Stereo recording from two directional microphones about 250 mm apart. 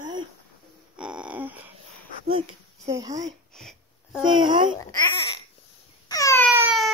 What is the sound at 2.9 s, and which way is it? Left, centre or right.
Speech, centre.